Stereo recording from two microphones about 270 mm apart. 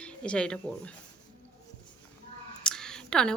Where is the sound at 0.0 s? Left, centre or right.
Centre.